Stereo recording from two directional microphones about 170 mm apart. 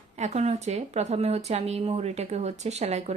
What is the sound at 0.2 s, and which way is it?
A woman's voice, 40° right (ahead or behind).